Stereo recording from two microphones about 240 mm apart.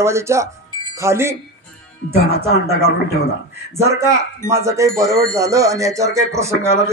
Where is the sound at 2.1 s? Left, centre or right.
Left.